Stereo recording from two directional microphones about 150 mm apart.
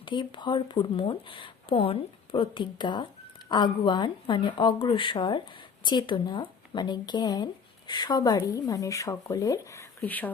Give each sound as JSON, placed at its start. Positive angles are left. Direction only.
{"t": 0.0, "sound": "speech", "side_deg": 30}